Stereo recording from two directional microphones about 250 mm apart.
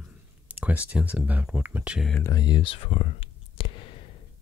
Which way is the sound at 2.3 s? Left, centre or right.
Centre.